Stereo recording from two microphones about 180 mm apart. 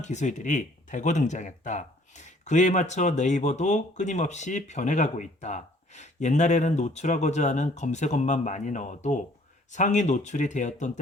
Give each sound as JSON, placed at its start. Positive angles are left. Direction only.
{"t": 0.0, "sound": "speech", "side_deg": 40}